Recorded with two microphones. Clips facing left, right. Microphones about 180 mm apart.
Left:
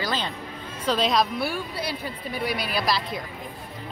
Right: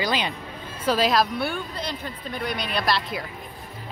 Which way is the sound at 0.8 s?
5° right (ahead or behind).